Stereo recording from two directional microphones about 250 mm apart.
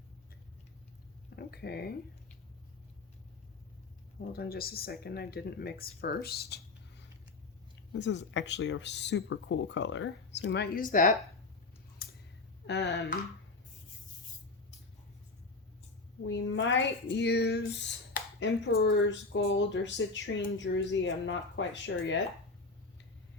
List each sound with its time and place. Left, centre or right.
1.4 s speech: left
4.3 s speech: left
12.0 s a sound: left
12.6 s speech: left
16.2 s speech: left